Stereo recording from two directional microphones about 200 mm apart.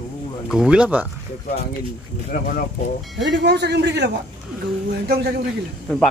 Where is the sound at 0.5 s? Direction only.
5° right (ahead or behind).